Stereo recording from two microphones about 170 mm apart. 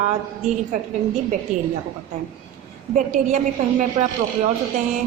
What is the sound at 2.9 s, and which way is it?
Speech, 45° right (ahead or behind).